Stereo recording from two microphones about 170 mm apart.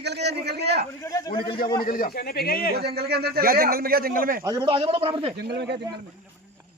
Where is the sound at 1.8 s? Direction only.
60° left (ahead or behind).